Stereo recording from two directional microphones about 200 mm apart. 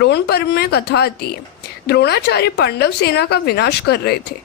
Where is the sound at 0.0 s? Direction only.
55° left (ahead or behind).